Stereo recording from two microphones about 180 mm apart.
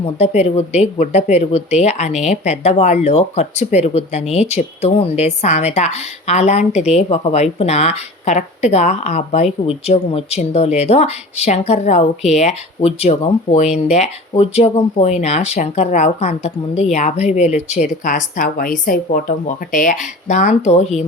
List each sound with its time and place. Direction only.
0.0 s speech: 35° left (ahead or behind)